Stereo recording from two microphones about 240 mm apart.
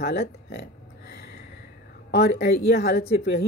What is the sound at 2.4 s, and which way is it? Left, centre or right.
Speech, left.